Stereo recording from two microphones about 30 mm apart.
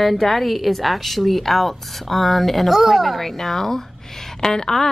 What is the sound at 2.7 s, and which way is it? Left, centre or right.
Speech, centre.